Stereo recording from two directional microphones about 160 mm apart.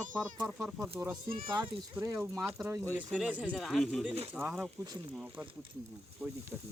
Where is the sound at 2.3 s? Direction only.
Centre (ahead or behind).